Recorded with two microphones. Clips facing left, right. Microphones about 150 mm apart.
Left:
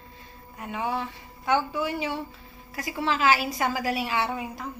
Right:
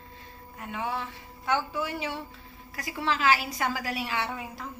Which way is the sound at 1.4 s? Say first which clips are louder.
Left 4 dB; 10° left (ahead or behind).